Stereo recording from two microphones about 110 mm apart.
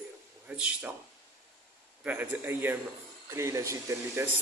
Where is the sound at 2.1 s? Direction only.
15° right (ahead or behind).